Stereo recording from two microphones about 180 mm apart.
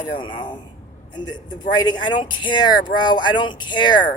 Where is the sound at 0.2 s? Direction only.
25° left (ahead or behind).